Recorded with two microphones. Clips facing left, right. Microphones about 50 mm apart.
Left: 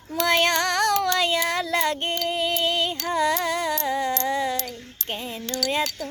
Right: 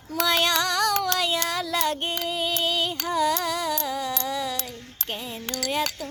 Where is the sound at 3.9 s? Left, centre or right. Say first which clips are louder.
Left 4 dB; left.